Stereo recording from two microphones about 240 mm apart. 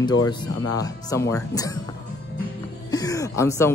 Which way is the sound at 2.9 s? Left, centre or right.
Centre.